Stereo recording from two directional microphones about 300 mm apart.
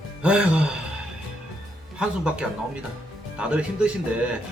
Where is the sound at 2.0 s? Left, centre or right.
Centre.